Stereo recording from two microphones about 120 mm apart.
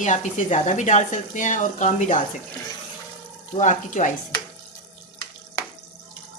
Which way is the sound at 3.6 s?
90° left.